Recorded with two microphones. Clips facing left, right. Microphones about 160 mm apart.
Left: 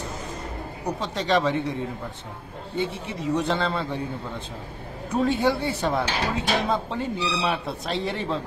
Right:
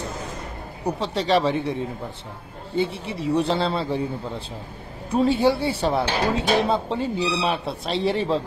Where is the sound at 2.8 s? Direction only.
30° right (ahead or behind).